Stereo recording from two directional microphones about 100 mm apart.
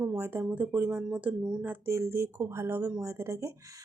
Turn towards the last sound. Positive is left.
turn(degrees=-25)  # may be behind; listen again after turning